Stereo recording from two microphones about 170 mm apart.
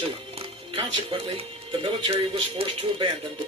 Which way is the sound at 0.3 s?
35° right (ahead or behind).